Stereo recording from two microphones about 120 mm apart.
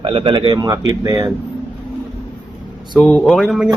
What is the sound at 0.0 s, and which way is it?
Speech, 50° right (ahead or behind).